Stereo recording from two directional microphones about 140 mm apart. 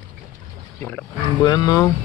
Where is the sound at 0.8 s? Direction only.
10° left (ahead or behind).